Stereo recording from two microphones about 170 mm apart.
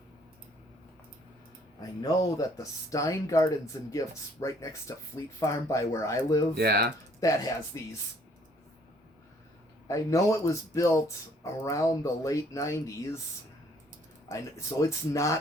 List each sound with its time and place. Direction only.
2.0 s speech: 20° left (ahead or behind)
6.6 s speech: 65° right (ahead or behind)
7.2 s speech: 20° left (ahead or behind)
9.8 s speech: 20° left (ahead or behind)
14.3 s speech: 20° left (ahead or behind)